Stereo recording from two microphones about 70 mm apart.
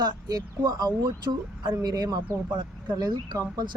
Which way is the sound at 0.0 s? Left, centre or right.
Right.